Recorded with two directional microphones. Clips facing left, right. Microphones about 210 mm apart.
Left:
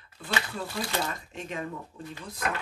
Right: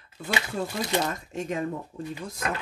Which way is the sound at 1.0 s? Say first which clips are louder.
Right 5 dB; 45° right (ahead or behind).